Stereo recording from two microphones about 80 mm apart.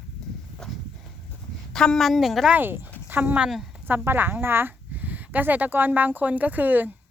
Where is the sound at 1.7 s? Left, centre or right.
Centre.